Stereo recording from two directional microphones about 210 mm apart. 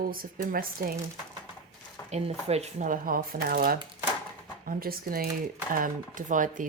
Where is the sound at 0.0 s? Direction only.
45° right (ahead or behind).